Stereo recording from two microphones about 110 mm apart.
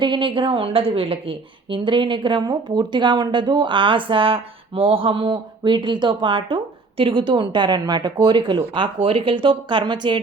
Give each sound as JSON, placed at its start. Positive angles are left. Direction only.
{"t": 0.0, "sound": "a woman's voice", "side_deg": -45}